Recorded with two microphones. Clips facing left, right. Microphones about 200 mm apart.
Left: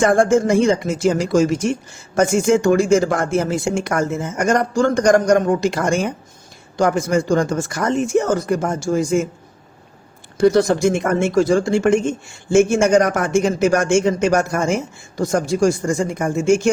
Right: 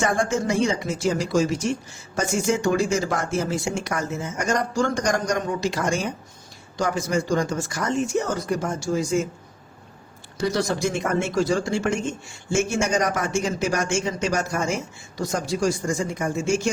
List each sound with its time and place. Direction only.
0.0 s speech: 50° left (ahead or behind)
10.3 s speech: 55° left (ahead or behind)